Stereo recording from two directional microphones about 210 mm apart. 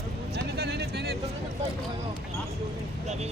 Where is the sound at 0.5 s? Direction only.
50° right (ahead or behind).